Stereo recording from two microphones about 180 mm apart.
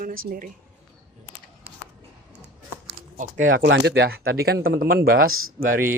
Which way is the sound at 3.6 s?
75° right (ahead or behind).